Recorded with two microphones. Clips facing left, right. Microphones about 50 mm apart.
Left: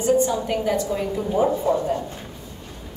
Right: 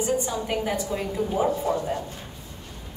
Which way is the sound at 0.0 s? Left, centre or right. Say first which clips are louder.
Left 6 dB; centre.